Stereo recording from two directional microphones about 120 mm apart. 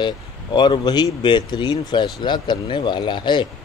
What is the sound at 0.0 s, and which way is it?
A man's voice, 40° left (ahead or behind).